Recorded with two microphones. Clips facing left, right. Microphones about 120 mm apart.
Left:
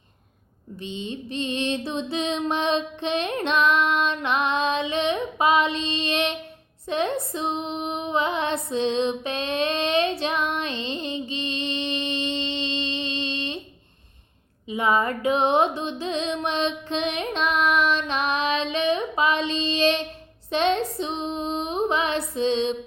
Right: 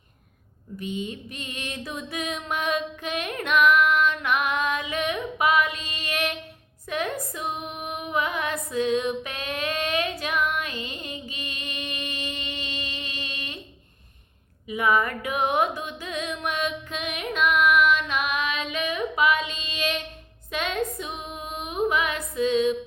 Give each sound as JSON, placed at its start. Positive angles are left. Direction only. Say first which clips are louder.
{"t": 0.8, "sound": "mantra", "louder": "right 1 dB", "side_deg": 25}
{"t": 6.8, "sound": "female singing", "louder": "left 4 dB", "side_deg": 25}
{"t": 14.7, "sound": "music", "louder": "left 1 dB", "side_deg": 25}
{"t": 20.5, "sound": "female singing", "louder": "left 5 dB", "side_deg": 30}